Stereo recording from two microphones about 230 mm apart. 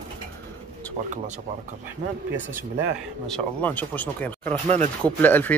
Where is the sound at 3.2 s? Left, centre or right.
Centre.